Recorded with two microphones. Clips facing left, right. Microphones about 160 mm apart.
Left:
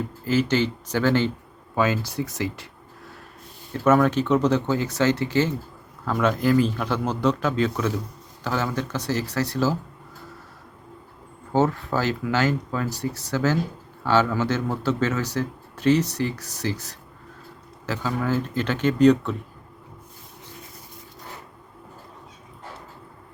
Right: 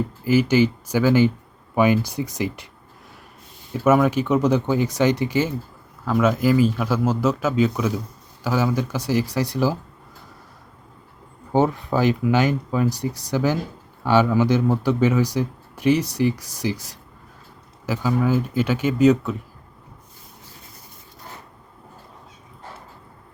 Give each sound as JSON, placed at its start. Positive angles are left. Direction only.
{"t": 0.3, "sound": "speech", "side_deg": -10}
{"t": 3.7, "sound": "speech", "side_deg": -10}
{"t": 11.5, "sound": "speech", "side_deg": -15}